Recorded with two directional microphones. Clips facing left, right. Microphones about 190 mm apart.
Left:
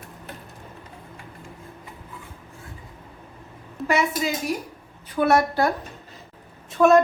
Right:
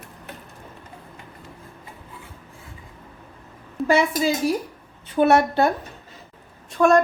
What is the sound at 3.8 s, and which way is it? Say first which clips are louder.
A woman's voice: right 4 dB; 30° right (ahead or behind).